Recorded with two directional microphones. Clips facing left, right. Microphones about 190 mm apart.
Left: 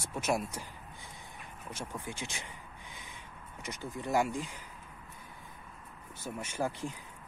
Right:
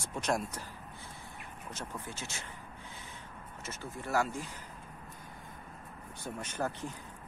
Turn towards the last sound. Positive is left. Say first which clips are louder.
# left 1 dB
turn(degrees=10)  # may be behind; listen again after turning